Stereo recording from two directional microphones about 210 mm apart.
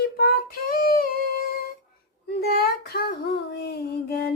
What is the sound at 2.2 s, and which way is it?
Child singing, 50° left (ahead or behind).